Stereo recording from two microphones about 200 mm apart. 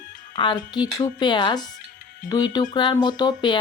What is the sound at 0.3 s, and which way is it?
Speech, 20° left (ahead or behind).